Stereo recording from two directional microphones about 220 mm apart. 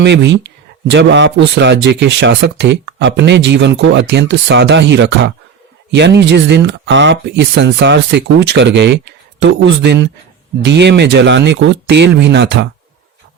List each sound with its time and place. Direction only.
0.0 s speech: 50° right (ahead or behind)